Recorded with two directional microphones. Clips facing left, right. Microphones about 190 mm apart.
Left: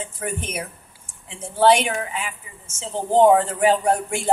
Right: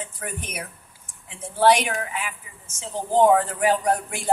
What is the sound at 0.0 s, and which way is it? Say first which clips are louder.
A woman's voice: left 5 dB; 25° left (ahead or behind).